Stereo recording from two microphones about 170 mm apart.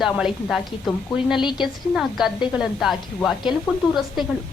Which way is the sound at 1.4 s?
25° left (ahead or behind).